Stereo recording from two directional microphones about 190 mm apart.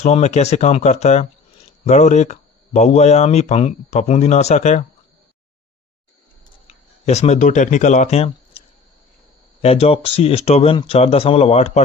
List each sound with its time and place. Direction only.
0.0 s speech: 35° left (ahead or behind)
6.7 s speech: 35° left (ahead or behind)